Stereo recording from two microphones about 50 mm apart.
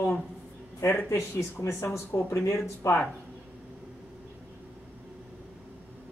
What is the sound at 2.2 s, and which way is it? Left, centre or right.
Speech, left.